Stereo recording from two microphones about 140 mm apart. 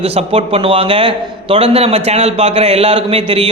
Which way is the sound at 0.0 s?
45° right (ahead or behind).